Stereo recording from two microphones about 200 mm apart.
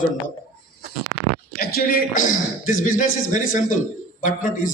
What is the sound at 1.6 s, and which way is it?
A man's voice, 50° left (ahead or behind).